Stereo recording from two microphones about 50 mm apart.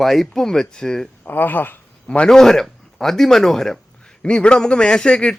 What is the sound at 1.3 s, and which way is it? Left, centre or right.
Speech, left.